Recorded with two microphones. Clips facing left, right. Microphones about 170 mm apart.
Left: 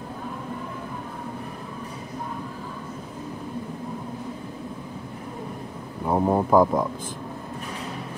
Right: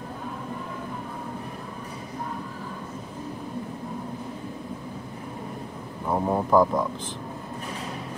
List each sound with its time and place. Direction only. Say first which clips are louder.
6.0 s speech: left 3 dB; 15° left (ahead or behind)